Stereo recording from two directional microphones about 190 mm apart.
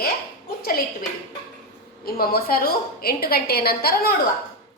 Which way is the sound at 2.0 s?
50° left (ahead or behind).